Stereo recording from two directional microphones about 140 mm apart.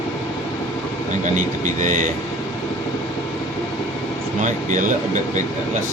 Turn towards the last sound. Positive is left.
turn(degrees=-65)  # may be behind; listen again after turning